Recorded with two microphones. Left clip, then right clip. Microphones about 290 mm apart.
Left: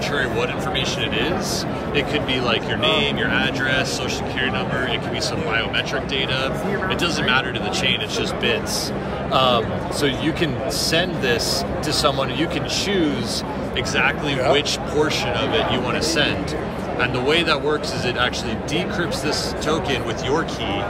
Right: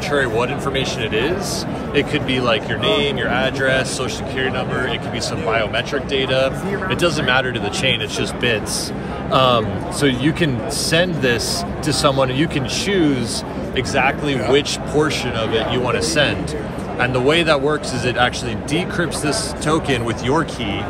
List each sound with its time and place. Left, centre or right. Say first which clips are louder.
0.1 s speech: right 7 dB; centre
6.1 s speech: right 6 dB; centre
9.3 s speech: right 3 dB; right